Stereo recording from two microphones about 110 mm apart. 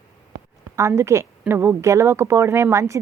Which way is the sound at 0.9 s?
25° right (ahead or behind).